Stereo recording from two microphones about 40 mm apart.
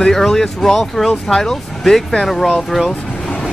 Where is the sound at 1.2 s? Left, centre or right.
Centre.